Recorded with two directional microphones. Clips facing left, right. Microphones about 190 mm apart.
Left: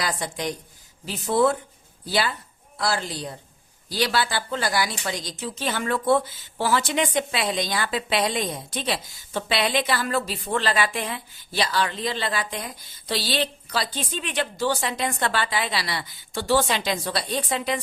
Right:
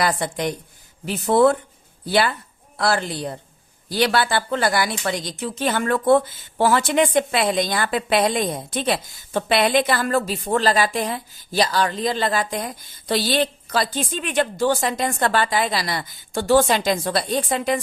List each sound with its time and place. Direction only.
0.0 s speech: 60° right (ahead or behind)